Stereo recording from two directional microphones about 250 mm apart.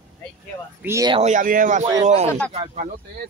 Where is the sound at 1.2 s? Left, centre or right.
Right.